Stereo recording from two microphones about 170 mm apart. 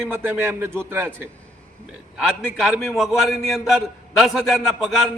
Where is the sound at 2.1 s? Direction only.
5° right (ahead or behind).